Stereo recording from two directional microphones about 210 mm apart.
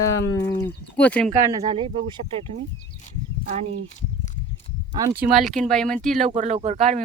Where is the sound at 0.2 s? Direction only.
15° left (ahead or behind).